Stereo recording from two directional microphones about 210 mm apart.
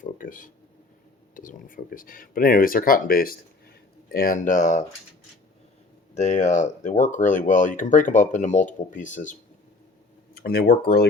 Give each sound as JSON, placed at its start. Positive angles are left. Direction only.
{"t": 0.0, "sound": "speech", "side_deg": 40}
{"t": 6.1, "sound": "speech", "side_deg": 35}
{"t": 10.3, "sound": "speech", "side_deg": 45}